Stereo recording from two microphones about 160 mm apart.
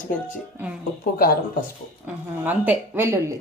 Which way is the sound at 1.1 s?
65° left (ahead or behind).